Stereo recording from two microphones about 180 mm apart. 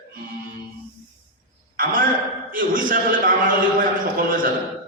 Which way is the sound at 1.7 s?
55° right (ahead or behind).